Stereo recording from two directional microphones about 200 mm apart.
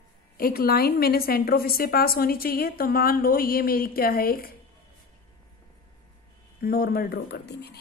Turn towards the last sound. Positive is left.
turn(degrees=55)  # may be behind; listen again after turning